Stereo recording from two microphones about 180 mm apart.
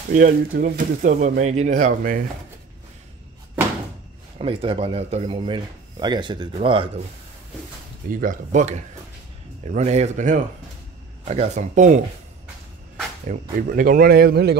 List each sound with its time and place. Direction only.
0.1 s speech: 50° right (ahead or behind)
4.4 s speech: 30° right (ahead or behind)
8.1 s speech: 50° right (ahead or behind)
13.3 s speech: 45° right (ahead or behind); by 14.6 s 65° right (ahead or behind)